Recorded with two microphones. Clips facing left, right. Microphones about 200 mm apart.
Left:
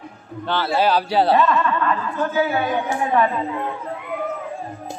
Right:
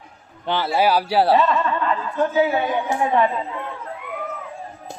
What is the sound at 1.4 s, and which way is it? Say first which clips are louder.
Speech: left 1 dB; 25° right (ahead or behind).